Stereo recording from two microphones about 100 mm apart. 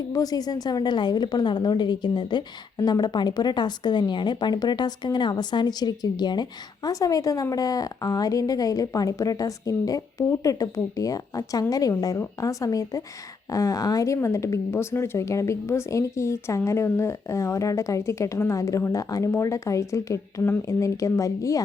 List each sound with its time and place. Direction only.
0.1 s a woman's voice: 40° left (ahead or behind)